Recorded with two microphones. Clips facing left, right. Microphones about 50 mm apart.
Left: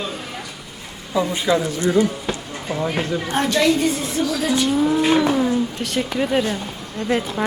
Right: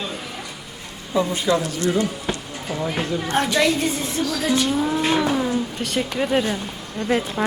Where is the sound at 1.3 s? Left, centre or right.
Left.